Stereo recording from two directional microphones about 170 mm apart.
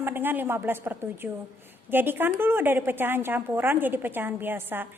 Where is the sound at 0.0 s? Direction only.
10° right (ahead or behind).